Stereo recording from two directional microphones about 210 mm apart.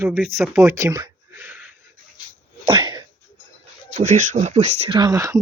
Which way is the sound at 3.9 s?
35° right (ahead or behind).